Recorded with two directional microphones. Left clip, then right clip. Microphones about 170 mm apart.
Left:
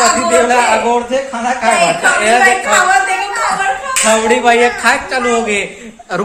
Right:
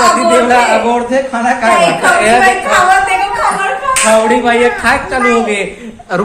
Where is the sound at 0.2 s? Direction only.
20° left (ahead or behind).